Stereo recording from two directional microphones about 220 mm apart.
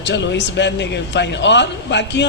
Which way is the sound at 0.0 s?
50° left (ahead or behind).